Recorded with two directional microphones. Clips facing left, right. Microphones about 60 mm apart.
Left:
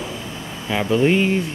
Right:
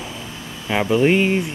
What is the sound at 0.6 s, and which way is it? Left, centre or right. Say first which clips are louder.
Speech: right 1 dB; centre.